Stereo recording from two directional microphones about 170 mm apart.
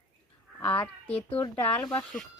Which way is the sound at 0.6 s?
10° left (ahead or behind).